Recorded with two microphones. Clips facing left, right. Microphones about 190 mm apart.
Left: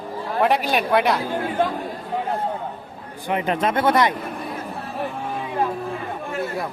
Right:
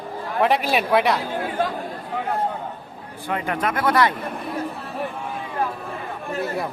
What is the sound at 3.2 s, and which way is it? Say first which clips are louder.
Speech: left 3 dB; 20° left (ahead or behind).